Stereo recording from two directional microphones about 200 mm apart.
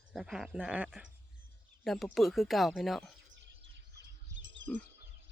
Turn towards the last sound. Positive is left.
turn(degrees=-65)  # may be behind; listen again after turning